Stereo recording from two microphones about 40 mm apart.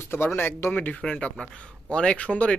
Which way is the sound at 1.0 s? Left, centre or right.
Left.